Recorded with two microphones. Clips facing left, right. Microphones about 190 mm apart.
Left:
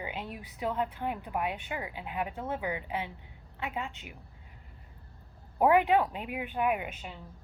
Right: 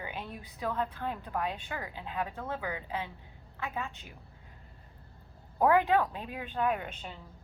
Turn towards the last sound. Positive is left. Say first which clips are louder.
# left 1 dB
turn(degrees=5)  # may be behind; listen again after turning